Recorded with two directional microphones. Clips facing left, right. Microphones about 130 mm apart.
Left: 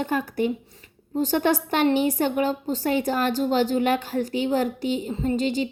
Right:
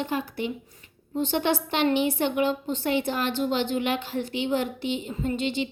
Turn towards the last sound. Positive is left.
turn(degrees=40)  # may be behind; listen again after turning